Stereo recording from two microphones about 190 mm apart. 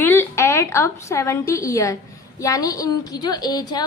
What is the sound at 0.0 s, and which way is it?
A woman's voice, 10° left (ahead or behind).